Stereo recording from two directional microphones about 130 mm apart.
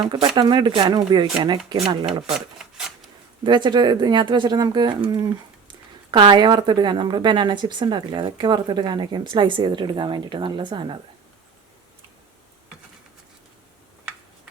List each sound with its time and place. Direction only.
0.1 s speech: 35° right (ahead or behind)
2.6 s a sound: 5° right (ahead or behind)
3.4 s speech: 35° right (ahead or behind)